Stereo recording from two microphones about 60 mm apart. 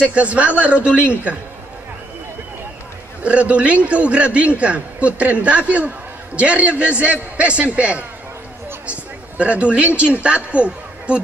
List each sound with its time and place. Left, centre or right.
0.0 s a man's voice: right
3.3 s a man's voice: right
8.8 s a sound: right
9.9 s a woman's voice: right